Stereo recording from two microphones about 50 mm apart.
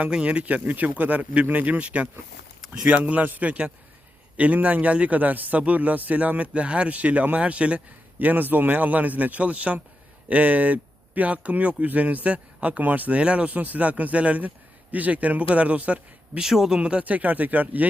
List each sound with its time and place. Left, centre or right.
0.1 s a man's voice: right
8.2 s a man's voice: right
16.4 s speech: centre
16.7 s speech: right